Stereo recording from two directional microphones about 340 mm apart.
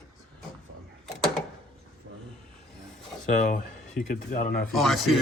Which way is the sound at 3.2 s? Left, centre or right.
Left.